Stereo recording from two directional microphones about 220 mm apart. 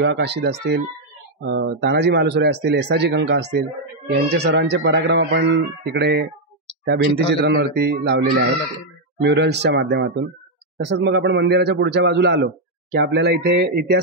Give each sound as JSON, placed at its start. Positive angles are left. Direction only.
{"t": 0.0, "sound": "speech", "side_deg": -50}